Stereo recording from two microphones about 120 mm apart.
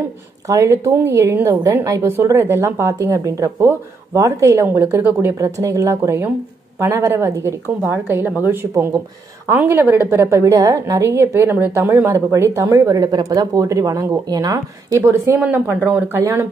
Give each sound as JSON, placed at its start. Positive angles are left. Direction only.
{"t": 0.5, "sound": "a woman's voice", "side_deg": -25}